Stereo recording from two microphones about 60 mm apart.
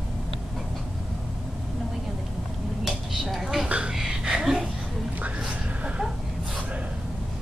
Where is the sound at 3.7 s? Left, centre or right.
Centre.